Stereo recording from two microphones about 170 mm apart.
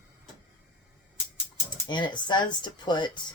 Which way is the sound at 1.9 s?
25° left (ahead or behind).